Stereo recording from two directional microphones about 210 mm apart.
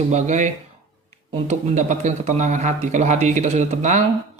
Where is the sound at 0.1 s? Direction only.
35° right (ahead or behind).